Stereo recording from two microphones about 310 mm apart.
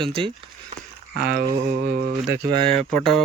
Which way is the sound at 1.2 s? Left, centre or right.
Right.